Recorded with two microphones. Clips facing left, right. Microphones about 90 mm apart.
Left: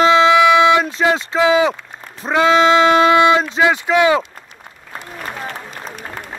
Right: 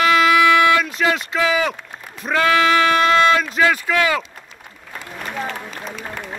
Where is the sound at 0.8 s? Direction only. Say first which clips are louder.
Left 3 dB; 30° left (ahead or behind).